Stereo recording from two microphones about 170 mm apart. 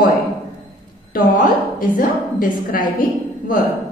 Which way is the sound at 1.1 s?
55° left (ahead or behind).